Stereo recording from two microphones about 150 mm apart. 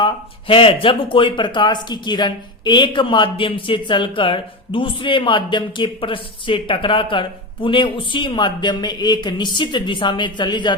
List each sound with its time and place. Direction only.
0.0 s speech: 35° left (ahead or behind)